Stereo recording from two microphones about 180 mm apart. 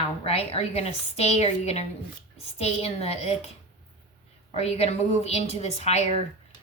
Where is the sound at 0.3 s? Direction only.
35° left (ahead or behind).